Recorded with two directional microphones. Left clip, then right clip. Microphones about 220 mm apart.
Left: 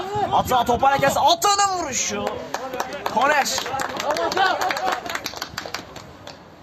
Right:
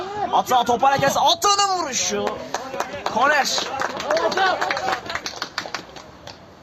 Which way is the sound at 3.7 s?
30° left (ahead or behind).